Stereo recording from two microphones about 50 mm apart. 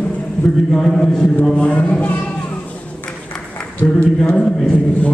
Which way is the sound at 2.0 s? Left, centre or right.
Left.